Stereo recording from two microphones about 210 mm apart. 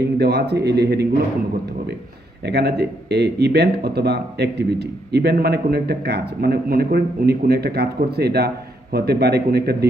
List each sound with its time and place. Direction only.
0.0 s speech: 50° right (ahead or behind)
2.4 s speech: 50° right (ahead or behind)